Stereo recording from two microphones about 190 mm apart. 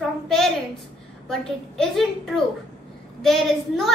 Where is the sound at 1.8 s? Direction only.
Centre (ahead or behind).